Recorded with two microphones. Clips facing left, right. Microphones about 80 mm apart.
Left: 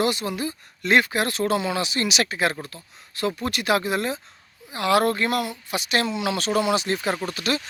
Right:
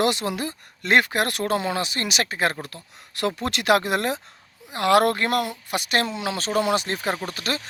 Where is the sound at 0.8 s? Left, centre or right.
Right.